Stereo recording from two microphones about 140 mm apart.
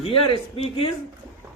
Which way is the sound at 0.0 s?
40° left (ahead or behind).